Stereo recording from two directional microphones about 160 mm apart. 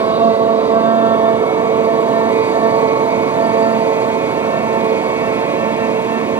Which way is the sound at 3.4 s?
25° right (ahead or behind).